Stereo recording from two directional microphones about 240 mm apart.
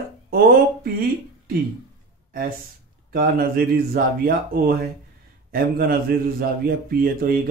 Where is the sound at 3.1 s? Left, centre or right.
Right.